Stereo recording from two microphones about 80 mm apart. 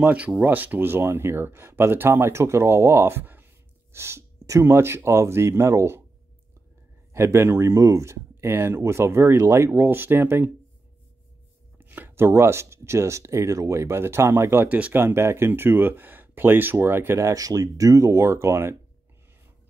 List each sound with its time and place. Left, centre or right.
0.0 s speech: centre; by 6.0 s right
7.1 s speech: right
11.8 s speech: right
17.2 s speech: right